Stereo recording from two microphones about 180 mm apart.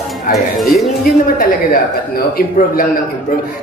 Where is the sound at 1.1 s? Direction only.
55° left (ahead or behind).